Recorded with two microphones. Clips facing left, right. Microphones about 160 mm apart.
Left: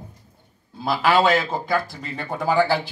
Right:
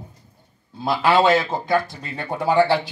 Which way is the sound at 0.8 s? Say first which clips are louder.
Right 1 dB; 25° right (ahead or behind).